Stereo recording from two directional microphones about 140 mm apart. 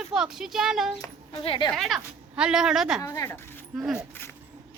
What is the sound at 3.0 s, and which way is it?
Speech, 20° left (ahead or behind).